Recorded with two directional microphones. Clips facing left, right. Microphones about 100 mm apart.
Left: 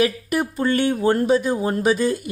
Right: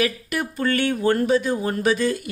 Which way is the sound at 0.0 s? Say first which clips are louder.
Left 4 dB; 25° left (ahead or behind).